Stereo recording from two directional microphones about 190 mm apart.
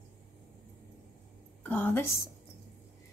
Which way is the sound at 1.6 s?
10° left (ahead or behind).